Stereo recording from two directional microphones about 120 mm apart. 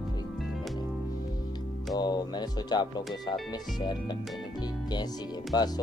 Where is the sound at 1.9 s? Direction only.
35° left (ahead or behind).